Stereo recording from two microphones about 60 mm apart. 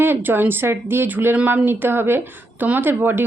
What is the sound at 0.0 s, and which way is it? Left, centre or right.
A woman's voice, right.